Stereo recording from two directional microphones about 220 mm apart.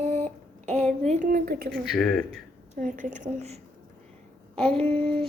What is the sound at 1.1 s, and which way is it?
Speech, 35° right (ahead or behind).